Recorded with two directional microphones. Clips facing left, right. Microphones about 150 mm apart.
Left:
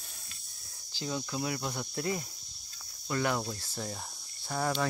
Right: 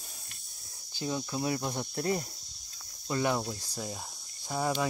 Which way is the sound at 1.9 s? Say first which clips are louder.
Right 3 dB; 35° right (ahead or behind).